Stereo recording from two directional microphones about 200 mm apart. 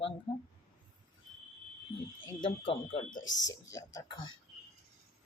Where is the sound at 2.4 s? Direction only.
30° left (ahead or behind).